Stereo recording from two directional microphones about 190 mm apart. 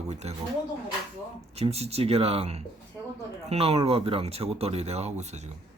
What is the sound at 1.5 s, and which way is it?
A man's voice, 35° right (ahead or behind).